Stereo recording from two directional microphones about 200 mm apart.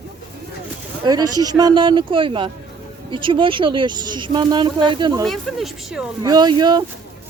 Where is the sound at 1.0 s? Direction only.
20° right (ahead or behind).